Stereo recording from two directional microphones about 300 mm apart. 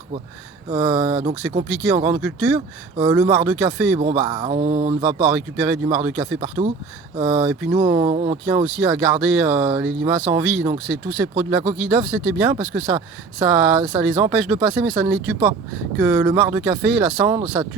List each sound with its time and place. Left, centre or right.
0.7 s speech: centre
5.3 s speech: centre